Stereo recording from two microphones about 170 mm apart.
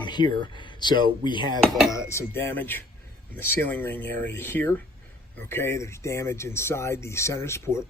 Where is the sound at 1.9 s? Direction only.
15° left (ahead or behind).